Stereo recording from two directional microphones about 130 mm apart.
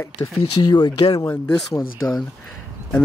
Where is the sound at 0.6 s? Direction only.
30° left (ahead or behind).